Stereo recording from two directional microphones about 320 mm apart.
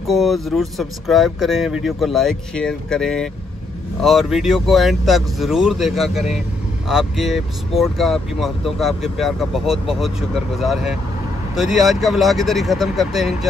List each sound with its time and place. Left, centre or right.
0.0 s speech: centre